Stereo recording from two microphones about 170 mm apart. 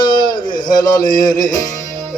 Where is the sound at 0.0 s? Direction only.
25° left (ahead or behind).